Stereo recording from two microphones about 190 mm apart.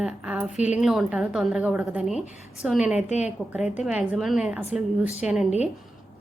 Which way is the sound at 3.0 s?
40° left (ahead or behind).